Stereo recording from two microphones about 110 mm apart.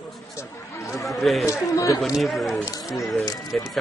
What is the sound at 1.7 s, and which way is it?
Speech, 30° left (ahead or behind).